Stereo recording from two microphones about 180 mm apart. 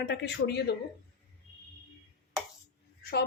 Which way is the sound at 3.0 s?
60° left (ahead or behind).